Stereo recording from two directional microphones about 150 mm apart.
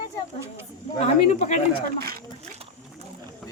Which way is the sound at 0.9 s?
45° left (ahead or behind).